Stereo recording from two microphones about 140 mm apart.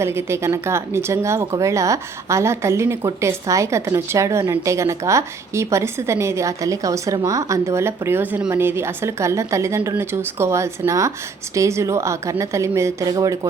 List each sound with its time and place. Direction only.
0.0 s speech: 20° right (ahead or behind)